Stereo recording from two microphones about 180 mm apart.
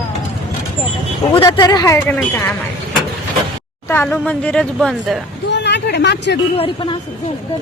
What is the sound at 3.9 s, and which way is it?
Speech, 10° left (ahead or behind).